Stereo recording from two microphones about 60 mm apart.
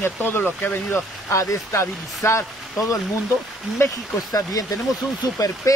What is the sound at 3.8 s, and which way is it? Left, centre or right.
Speech, left.